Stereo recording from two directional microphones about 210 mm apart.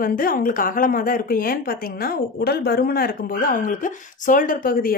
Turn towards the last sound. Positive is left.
turn(degrees=45)  # may be behind; listen again after turning